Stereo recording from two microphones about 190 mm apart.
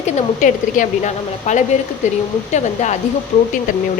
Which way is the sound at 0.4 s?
40° left (ahead or behind).